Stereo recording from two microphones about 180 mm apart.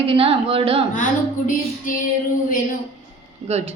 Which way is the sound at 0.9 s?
45° left (ahead or behind).